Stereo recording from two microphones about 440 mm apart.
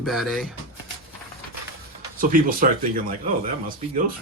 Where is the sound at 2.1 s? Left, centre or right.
Centre.